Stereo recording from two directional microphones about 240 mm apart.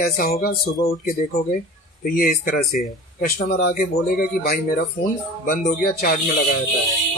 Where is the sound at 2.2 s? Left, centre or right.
Left.